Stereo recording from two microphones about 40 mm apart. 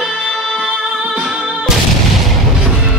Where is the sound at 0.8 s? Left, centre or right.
Centre.